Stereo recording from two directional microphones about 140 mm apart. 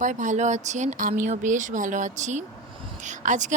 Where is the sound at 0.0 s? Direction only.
65° right (ahead or behind).